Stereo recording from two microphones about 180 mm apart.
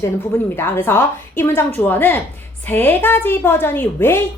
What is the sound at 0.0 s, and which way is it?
A woman's voice, 10° left (ahead or behind).